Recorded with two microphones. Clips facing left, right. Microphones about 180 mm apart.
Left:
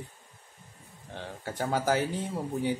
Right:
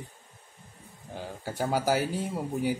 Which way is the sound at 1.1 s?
5° right (ahead or behind).